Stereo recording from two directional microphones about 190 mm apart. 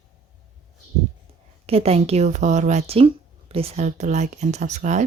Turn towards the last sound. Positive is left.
turn(degrees=-40)  # may be behind; listen again after turning